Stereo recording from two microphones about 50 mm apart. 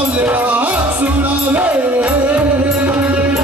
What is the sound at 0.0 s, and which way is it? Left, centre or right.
Music, right.